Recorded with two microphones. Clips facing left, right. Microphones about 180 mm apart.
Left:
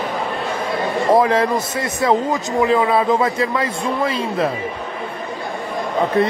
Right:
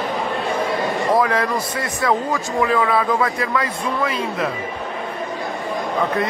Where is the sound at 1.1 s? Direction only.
25° left (ahead or behind).